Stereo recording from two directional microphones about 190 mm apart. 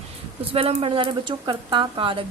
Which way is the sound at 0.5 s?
30° right (ahead or behind).